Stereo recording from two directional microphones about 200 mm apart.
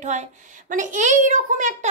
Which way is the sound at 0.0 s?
35° right (ahead or behind).